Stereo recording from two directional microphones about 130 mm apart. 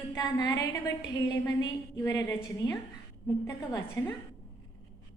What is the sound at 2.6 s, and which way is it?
Speech, 35° left (ahead or behind).